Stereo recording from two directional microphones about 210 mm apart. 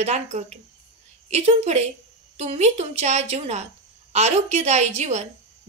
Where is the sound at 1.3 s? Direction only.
30° right (ahead or behind).